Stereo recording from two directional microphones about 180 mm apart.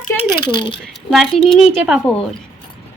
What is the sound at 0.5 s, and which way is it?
Speech, 30° left (ahead or behind).